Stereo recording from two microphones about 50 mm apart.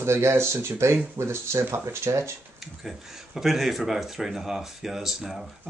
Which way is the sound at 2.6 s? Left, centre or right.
Centre.